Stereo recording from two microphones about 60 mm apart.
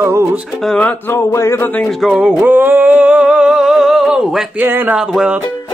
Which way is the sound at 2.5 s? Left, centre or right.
Right.